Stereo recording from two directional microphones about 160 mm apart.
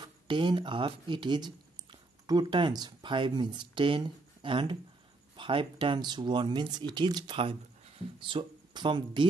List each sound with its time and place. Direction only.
0.0 s speech: 30° right (ahead or behind)